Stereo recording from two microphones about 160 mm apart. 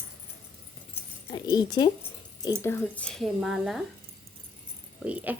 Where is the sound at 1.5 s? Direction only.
25° left (ahead or behind).